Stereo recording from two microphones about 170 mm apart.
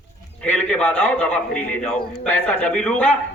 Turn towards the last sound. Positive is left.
turn(degrees=5)  # may be behind; listen again after turning